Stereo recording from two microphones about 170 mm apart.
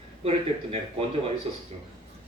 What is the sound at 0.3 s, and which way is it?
Speech, 35° right (ahead or behind).